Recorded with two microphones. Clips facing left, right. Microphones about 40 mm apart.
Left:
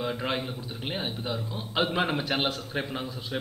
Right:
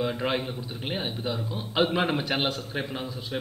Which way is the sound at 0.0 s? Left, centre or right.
Centre.